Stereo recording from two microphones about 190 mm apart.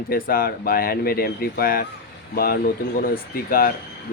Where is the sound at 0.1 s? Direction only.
50° left (ahead or behind).